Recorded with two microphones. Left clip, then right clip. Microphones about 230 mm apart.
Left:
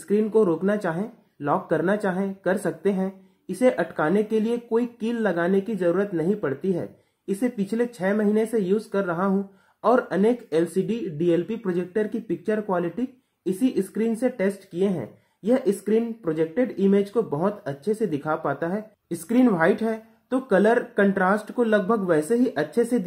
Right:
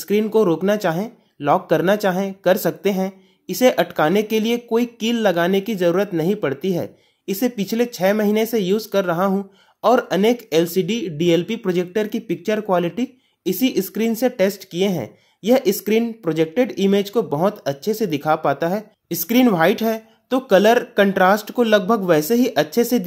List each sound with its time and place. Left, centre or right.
0.1 s speech: right